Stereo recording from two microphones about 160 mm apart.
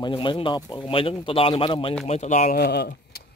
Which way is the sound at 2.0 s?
45° left (ahead or behind).